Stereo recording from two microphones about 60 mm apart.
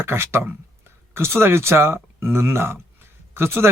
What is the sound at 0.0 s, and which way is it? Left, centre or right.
Speech, right.